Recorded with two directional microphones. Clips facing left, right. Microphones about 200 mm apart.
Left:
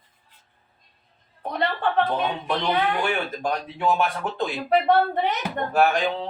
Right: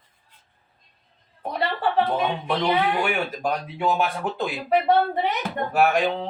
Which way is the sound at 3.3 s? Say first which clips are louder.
Right 1 dB; 5° right (ahead or behind).